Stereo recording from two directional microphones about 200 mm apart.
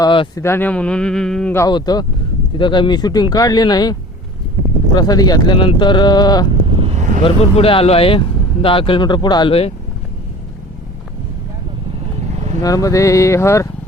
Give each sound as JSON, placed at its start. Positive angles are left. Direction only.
{"t": 0.0, "sound": "speech", "side_deg": 20}
{"t": 0.4, "sound": "speech", "side_deg": 10}
{"t": 1.6, "sound": "speech", "side_deg": 20}
{"t": 4.9, "sound": "speech", "side_deg": 20}
{"t": 6.7, "sound": "vehicle", "side_deg": -25}
{"t": 7.2, "sound": "speech", "side_deg": 25}
{"t": 12.3, "sound": "vehicle", "side_deg": -35}
{"t": 12.6, "sound": "a sound", "side_deg": 15}